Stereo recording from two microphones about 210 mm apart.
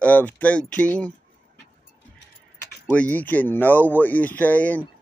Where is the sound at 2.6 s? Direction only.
10° left (ahead or behind).